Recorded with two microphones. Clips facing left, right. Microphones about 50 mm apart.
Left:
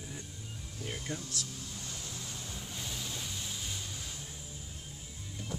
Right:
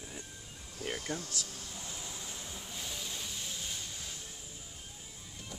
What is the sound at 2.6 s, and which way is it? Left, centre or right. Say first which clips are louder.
Vehicle: left 1 dB; centre.